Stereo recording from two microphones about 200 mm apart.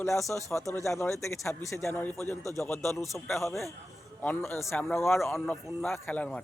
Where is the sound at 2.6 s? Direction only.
15° left (ahead or behind).